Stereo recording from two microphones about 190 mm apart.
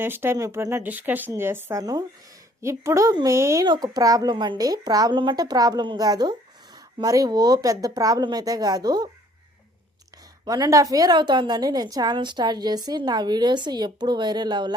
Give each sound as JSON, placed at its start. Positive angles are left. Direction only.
{"t": 0.0, "sound": "a woman's voice", "side_deg": -10}
{"t": 10.4, "sound": "a woman's voice", "side_deg": -20}